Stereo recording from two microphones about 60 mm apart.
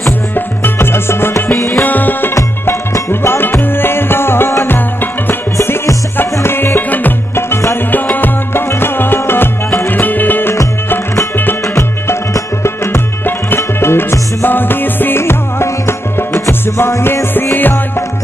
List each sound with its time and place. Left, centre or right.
0.7 s music: left
1.8 s music: left
2.6 s music: left
6.4 s music: left
12.6 s music: left